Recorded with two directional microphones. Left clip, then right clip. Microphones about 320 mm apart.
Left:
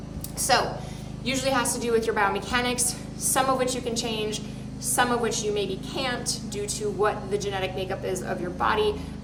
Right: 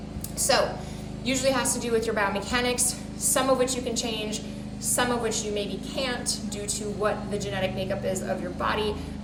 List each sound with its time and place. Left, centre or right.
0.5 s a woman's voice: centre